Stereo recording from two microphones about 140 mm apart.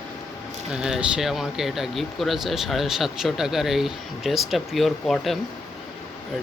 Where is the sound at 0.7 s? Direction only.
5° right (ahead or behind).